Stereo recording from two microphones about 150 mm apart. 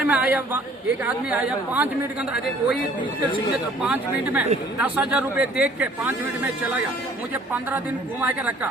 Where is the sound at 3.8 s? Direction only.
10° right (ahead or behind).